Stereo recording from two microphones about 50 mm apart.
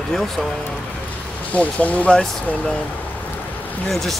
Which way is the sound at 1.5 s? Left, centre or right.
Left.